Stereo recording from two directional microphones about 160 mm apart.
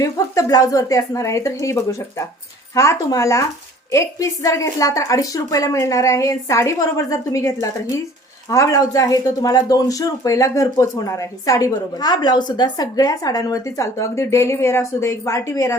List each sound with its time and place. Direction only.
0.0 s speech: 20° left (ahead or behind)